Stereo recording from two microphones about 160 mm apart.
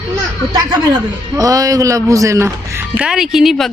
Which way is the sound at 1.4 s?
20° right (ahead or behind).